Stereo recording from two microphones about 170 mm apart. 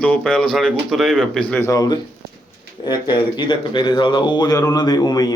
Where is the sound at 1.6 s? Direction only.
20° left (ahead or behind).